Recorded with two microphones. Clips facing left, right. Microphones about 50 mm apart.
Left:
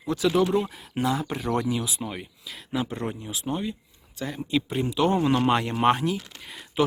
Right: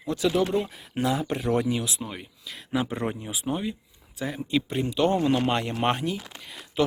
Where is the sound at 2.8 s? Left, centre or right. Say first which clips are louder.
Right 2 dB; centre.